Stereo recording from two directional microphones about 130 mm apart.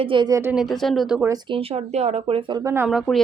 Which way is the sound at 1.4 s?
45° right (ahead or behind).